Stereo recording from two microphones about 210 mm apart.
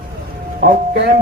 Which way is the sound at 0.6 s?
45° right (ahead or behind).